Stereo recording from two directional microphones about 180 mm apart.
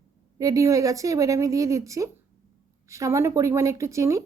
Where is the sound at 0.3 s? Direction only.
20° right (ahead or behind).